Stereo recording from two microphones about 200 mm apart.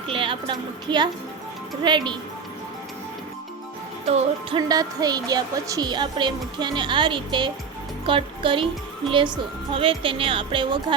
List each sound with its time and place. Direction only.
0.1 s a woman's voice: 25° right (ahead or behind)
4.0 s music: 30° right (ahead or behind)
4.7 s speech: 20° right (ahead or behind)